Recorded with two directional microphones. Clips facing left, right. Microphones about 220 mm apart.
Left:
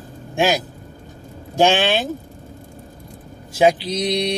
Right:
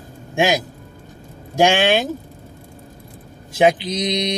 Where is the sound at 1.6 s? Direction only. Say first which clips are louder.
Right 1 dB; 15° right (ahead or behind).